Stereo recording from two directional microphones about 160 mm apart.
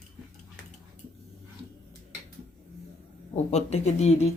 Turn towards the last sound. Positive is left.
turn(degrees=40)  # may be behind; listen again after turning